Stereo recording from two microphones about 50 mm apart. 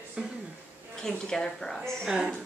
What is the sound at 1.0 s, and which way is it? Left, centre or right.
Speech, centre.